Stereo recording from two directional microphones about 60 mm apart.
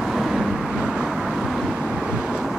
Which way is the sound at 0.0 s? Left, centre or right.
Centre.